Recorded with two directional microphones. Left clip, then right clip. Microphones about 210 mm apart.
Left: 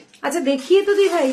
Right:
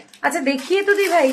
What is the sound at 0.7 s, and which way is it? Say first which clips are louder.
Speech: left 1 dB; 20° left (ahead or behind).